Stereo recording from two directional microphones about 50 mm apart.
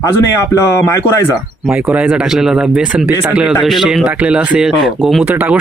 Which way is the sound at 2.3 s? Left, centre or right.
Centre.